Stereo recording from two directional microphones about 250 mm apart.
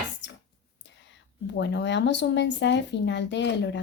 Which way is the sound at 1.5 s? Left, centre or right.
Left.